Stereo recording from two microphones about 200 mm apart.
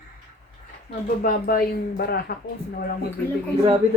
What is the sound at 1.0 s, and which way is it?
Speech, 45° left (ahead or behind).